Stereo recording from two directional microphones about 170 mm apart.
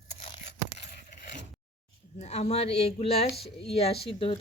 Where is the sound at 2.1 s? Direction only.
40° left (ahead or behind).